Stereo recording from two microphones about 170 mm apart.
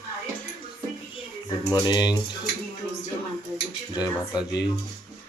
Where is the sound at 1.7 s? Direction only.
25° left (ahead or behind).